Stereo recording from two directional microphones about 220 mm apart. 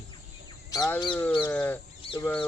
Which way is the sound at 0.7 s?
15° left (ahead or behind).